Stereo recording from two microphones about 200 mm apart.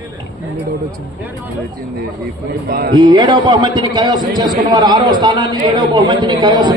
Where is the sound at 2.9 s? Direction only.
20° right (ahead or behind).